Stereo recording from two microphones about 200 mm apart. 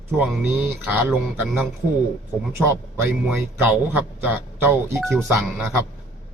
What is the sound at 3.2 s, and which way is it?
A man's voice, 10° right (ahead or behind).